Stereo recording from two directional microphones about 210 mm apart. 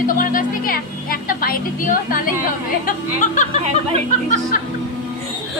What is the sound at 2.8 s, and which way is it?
Speech, 35° left (ahead or behind).